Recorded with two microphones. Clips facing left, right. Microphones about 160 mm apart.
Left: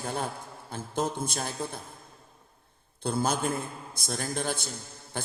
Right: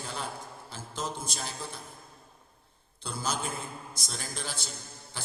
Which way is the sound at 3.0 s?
55° left (ahead or behind).